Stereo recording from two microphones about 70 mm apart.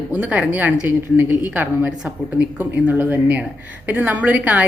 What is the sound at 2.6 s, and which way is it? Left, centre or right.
Speech, right.